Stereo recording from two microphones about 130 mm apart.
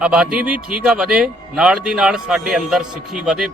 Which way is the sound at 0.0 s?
5° right (ahead or behind).